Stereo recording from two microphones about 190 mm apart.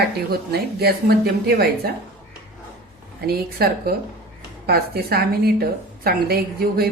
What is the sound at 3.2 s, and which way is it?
A woman's voice, 55° right (ahead or behind).